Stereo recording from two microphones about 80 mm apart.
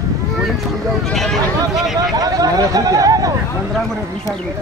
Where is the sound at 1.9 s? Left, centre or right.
Right.